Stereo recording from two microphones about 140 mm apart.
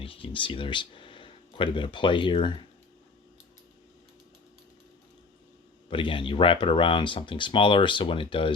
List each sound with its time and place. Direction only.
0.0 s speech: 40° left (ahead or behind)
5.9 s speech: 35° left (ahead or behind)